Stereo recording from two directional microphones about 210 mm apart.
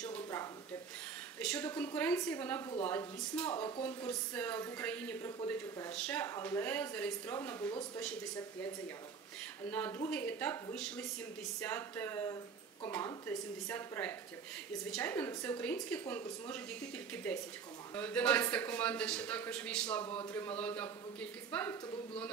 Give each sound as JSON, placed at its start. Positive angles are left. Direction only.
{"t": 0.0, "sound": "a sound", "side_deg": 10}
{"t": 1.4, "sound": "a woman's voice", "side_deg": 5}
{"t": 3.5, "sound": "speech", "side_deg": 25}
{"t": 3.8, "sound": "speech", "side_deg": 5}
{"t": 9.7, "sound": "speech", "side_deg": 10}